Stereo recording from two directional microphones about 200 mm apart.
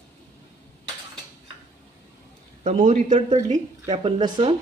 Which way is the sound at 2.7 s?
40° right (ahead or behind).